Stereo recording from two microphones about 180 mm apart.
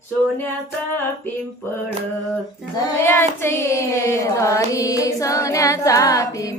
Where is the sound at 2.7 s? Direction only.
15° left (ahead or behind).